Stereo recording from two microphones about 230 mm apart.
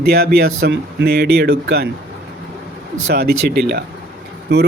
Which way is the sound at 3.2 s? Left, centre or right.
Right.